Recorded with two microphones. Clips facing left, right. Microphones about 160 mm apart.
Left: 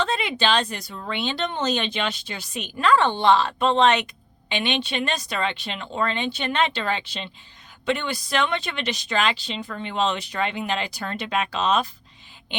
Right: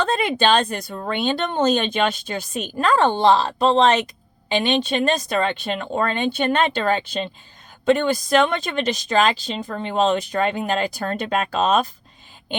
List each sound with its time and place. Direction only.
0.0 s speech: 50° right (ahead or behind)